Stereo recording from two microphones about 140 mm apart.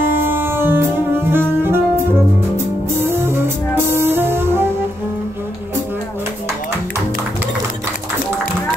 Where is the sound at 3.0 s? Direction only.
15° right (ahead or behind).